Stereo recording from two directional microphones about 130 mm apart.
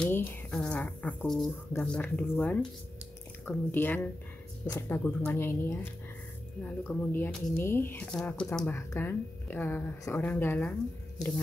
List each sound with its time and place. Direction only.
0.0 s speech: 15° left (ahead or behind)
6.9 s speech: 15° left (ahead or behind)
8.7 s speech: 20° left (ahead or behind)